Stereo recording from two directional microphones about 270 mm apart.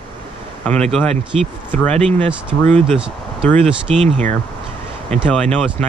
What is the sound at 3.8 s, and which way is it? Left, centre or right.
Speech, centre.